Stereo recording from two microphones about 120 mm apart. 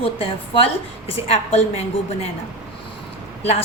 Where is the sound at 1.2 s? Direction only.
60° left (ahead or behind).